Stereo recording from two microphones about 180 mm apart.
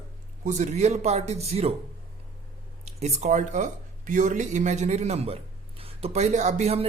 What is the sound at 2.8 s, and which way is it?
Speech, 35° right (ahead or behind).